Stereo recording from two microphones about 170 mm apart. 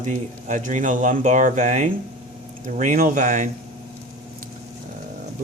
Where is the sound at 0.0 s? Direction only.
45° right (ahead or behind).